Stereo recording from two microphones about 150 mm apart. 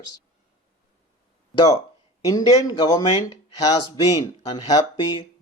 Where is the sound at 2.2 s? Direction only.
25° left (ahead or behind).